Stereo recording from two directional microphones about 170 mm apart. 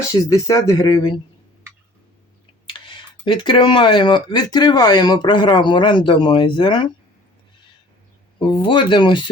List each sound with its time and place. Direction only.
0.1 s speech: 20° left (ahead or behind)
2.6 s speech: 30° left (ahead or behind)
8.4 s speech: 30° left (ahead or behind)